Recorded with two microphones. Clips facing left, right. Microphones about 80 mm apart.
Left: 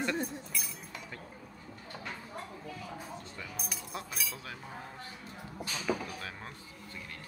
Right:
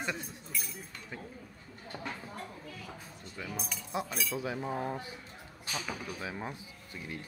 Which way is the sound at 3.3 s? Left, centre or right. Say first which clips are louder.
Right 3 dB; centre.